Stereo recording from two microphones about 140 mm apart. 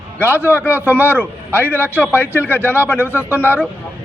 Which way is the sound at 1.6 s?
15° left (ahead or behind).